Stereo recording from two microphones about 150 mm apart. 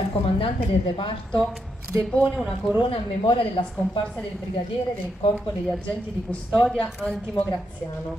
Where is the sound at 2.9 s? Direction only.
35° left (ahead or behind).